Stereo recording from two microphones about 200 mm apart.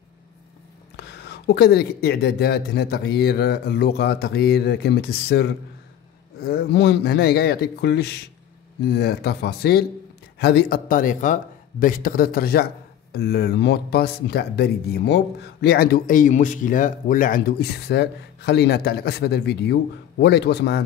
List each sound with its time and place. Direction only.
0.9 s speech: 55° left (ahead or behind)